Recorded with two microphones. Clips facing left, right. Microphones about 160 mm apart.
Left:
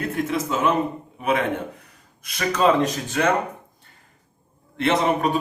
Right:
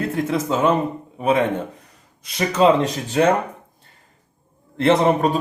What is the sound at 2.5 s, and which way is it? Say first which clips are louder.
Speech: right 3 dB; 25° right (ahead or behind).